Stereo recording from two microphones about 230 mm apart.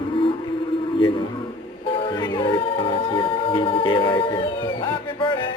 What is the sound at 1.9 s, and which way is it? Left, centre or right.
Music, left.